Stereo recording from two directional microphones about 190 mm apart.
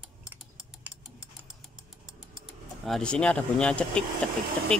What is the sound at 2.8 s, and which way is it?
Speech, 5° left (ahead or behind).